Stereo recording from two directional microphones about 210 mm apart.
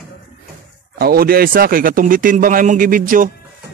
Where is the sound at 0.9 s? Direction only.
45° right (ahead or behind).